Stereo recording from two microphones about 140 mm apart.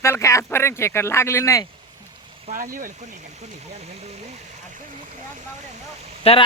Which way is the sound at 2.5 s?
80° right.